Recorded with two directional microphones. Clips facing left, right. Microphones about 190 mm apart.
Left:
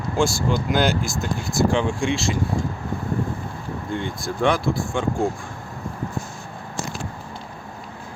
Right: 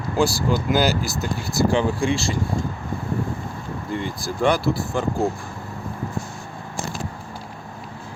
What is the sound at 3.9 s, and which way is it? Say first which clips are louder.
Speech: even; centre (ahead or behind).